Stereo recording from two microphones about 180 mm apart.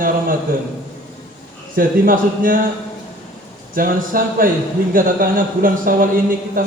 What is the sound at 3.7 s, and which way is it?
Speech, 50° right (ahead or behind).